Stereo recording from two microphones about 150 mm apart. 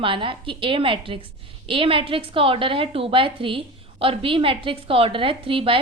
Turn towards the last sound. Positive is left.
turn(degrees=-35)  # may be behind; listen again after turning